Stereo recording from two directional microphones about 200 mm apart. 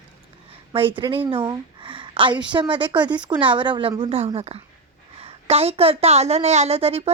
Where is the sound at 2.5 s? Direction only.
25° right (ahead or behind).